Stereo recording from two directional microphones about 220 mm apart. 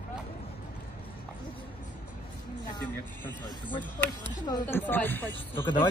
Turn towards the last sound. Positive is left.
turn(degrees=10)  # may be behind; listen again after turning